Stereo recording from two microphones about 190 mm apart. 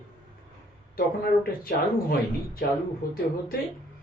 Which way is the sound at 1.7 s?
50° left (ahead or behind).